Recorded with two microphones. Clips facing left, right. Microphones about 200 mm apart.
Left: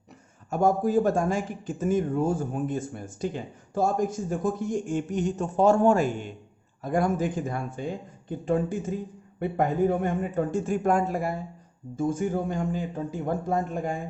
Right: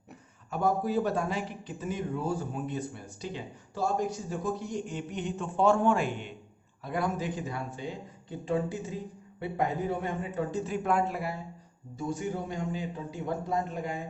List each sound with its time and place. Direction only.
0.5 s a man's voice: 45° left (ahead or behind)